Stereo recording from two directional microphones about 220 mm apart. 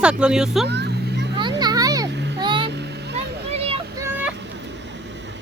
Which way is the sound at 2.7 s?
50° right (ahead or behind).